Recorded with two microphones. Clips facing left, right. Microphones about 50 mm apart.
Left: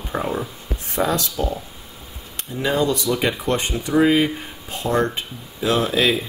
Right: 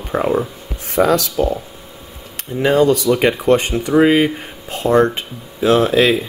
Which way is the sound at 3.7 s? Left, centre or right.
Right.